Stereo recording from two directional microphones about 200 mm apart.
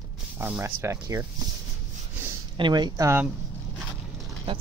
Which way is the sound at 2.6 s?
20° right (ahead or behind).